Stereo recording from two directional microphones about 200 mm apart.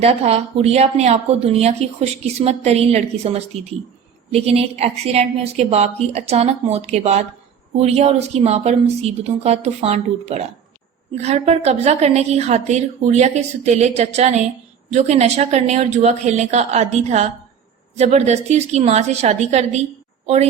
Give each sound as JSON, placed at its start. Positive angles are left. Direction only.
{"t": 0.0, "sound": "a woman's voice", "side_deg": -30}